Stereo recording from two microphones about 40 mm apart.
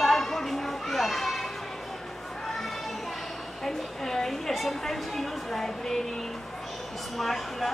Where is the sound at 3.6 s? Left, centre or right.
Centre.